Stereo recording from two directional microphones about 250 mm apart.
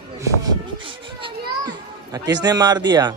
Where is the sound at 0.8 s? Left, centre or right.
Centre.